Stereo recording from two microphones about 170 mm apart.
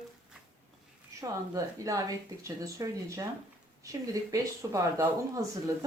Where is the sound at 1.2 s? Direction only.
20° right (ahead or behind).